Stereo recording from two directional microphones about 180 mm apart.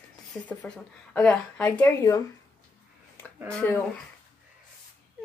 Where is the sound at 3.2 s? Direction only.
10° left (ahead or behind).